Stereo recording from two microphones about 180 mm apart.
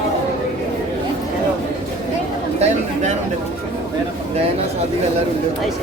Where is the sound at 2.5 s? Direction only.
40° right (ahead or behind).